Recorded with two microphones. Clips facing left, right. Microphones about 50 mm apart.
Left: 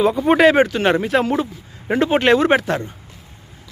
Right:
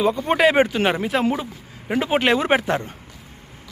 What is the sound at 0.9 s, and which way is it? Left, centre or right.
Speech, centre.